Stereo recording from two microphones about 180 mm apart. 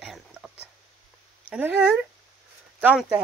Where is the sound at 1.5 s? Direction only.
10° right (ahead or behind).